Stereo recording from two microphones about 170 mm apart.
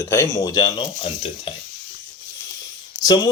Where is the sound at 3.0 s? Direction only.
25° left (ahead or behind).